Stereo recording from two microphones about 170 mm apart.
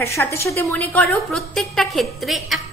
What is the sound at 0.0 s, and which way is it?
A woman's voice, 15° left (ahead or behind).